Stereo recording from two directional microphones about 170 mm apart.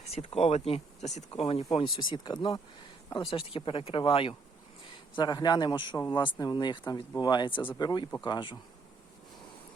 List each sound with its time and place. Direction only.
0.1 s speech: 35° left (ahead or behind)